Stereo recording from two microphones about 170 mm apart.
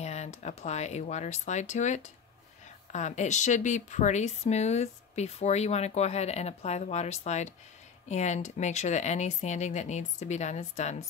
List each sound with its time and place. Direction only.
0.0 s speech: 40° left (ahead or behind)